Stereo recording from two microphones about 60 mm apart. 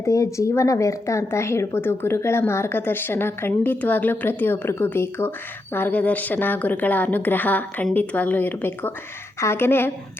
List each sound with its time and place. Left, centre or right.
0.0 s a woman's voice: left
9.4 s a woman's voice: left